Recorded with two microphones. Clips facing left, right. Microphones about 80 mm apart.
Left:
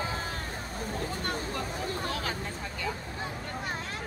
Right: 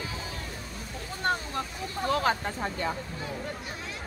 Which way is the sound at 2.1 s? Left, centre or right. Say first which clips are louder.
Right 8 dB; right.